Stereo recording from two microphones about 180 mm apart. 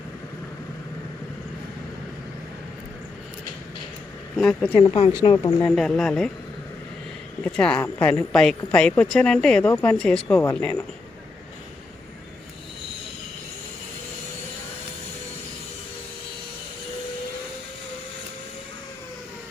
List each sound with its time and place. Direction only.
4.4 s speech: 5° left (ahead or behind)
4.8 s speech: 25° left (ahead or behind)
5.6 s speech: 5° left (ahead or behind)
7.4 s speech: 5° left (ahead or behind)